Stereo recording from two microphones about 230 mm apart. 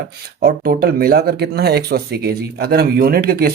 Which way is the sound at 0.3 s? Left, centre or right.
Right.